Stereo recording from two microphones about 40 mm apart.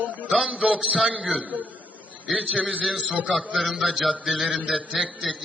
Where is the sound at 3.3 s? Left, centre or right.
Centre.